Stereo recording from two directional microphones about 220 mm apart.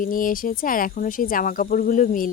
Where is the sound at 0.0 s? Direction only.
40° left (ahead or behind).